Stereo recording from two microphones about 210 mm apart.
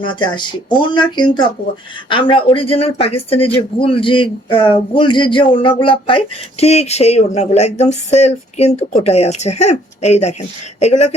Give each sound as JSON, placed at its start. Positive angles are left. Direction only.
{"t": 0.2, "sound": "speech", "side_deg": 20}